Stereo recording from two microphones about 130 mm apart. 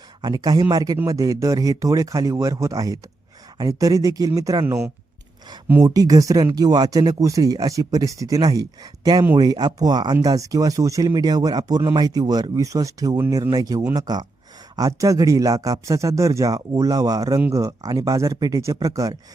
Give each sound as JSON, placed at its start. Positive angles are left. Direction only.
{"t": 0.2, "sound": "speech", "side_deg": -30}
{"t": 5.8, "sound": "speech", "side_deg": -30}